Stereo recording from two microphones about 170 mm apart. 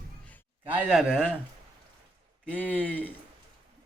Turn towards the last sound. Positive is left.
turn(degrees=10)  # may be behind; listen again after turning